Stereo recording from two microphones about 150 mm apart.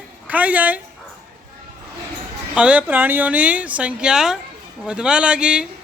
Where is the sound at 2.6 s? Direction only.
10° right (ahead or behind).